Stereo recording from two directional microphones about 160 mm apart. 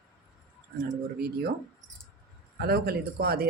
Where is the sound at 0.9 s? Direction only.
70° right (ahead or behind).